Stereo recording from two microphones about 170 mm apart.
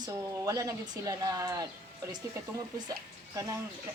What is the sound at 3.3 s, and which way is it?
Speech, 20° right (ahead or behind).